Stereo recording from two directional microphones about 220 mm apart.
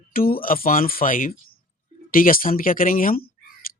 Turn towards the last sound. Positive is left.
turn(degrees=40)  # may be behind; listen again after turning